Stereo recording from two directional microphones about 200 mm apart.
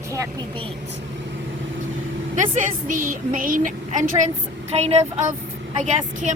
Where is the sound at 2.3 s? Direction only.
40° right (ahead or behind).